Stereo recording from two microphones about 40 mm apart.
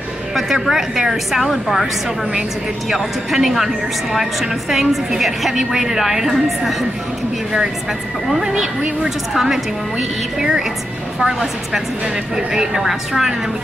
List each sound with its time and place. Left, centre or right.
0.5 s speech: centre
1.5 s a woman's voice: centre
2.9 s speech: centre
8.3 s speech: centre
12.4 s speech: centre